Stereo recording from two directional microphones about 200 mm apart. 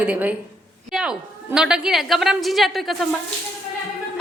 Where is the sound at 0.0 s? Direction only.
5° right (ahead or behind).